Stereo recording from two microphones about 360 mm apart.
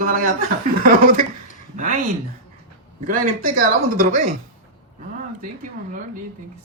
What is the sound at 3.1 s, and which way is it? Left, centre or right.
Speech, right.